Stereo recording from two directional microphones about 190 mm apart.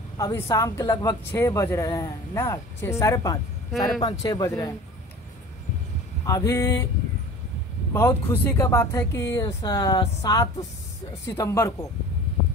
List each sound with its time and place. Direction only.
0.2 s speech: 15° left (ahead or behind)
6.2 s speech: 15° left (ahead or behind)
7.9 s speech: 10° left (ahead or behind)